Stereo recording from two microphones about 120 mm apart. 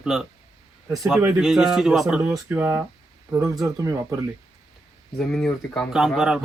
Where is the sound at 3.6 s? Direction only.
25° right (ahead or behind).